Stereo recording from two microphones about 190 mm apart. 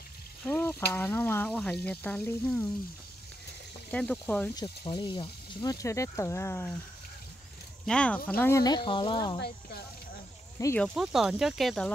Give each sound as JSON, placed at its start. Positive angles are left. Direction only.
{"t": 0.5, "sound": "speech", "side_deg": 10}
{"t": 3.9, "sound": "speech", "side_deg": 5}
{"t": 4.6, "sound": "speech", "side_deg": 25}
{"t": 7.8, "sound": "speech", "side_deg": 5}
{"t": 10.8, "sound": "speech", "side_deg": 0}